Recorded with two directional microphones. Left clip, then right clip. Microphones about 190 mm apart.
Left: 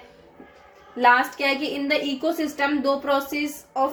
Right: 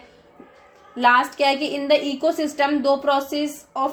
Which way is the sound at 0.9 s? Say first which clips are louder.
Right 1 dB; 40° right (ahead or behind).